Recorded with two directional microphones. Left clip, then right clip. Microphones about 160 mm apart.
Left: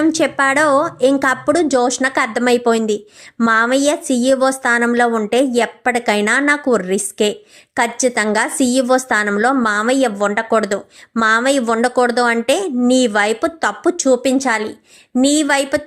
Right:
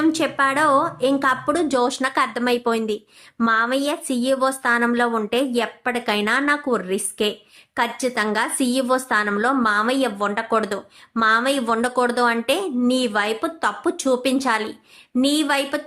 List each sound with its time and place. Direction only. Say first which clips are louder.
0.0 s a woman's voice: left 4 dB; 30° left (ahead or behind)